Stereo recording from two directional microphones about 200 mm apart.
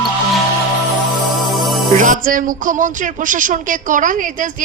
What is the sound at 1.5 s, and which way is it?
Music, centre (ahead or behind).